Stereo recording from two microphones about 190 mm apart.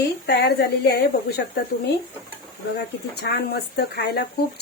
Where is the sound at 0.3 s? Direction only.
60° left (ahead or behind).